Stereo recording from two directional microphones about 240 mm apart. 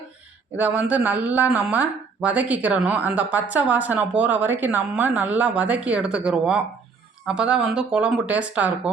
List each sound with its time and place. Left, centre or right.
0.5 s speech: centre